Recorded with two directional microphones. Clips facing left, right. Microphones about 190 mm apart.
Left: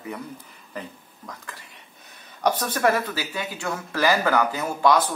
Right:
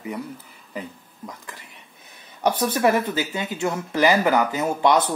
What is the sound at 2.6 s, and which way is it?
Speech, 15° right (ahead or behind).